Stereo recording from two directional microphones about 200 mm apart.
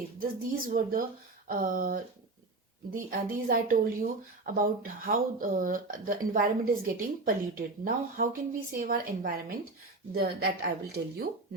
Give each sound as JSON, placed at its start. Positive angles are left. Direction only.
{"t": 0.2, "sound": "speech", "side_deg": -45}